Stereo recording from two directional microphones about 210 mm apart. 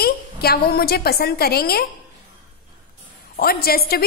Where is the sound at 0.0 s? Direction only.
45° left (ahead or behind).